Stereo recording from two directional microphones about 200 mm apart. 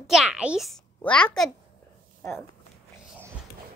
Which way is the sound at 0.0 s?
Centre (ahead or behind).